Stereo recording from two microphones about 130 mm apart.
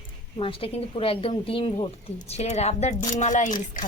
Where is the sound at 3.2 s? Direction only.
70° left (ahead or behind).